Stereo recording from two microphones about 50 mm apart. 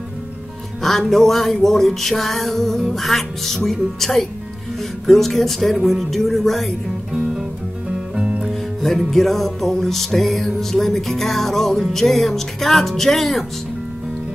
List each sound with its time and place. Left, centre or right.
0.8 s music: centre
7.1 s music: centre
8.8 s music: centre